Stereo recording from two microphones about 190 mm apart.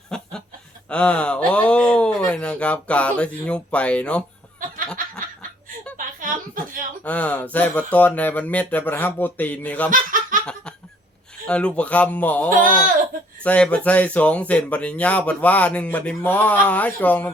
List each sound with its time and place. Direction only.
0.1 s snicker: 5° left (ahead or behind)
0.9 s speech: 5° left (ahead or behind)
4.6 s snicker: 45° right (ahead or behind)
6.1 s chuckle: 45° right (ahead or behind)
7.0 s speech: 5° left (ahead or behind)
9.9 s laughter: 45° right (ahead or behind)
11.4 s speech: 5° left (ahead or behind)
12.5 s speech: 45° right (ahead or behind)
13.4 s speech: 5° left (ahead or behind)